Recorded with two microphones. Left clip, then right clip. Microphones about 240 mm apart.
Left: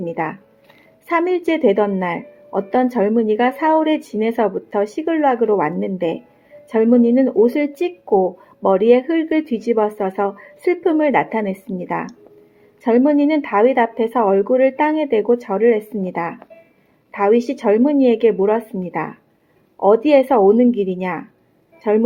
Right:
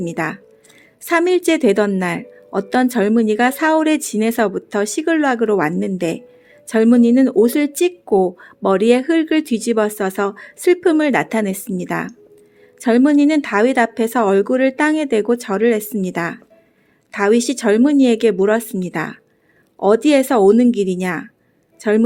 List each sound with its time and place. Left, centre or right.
0.0 s a woman's voice: right